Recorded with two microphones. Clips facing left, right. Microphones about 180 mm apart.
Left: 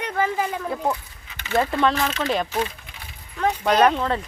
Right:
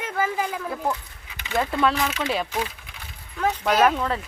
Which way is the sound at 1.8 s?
5° right (ahead or behind).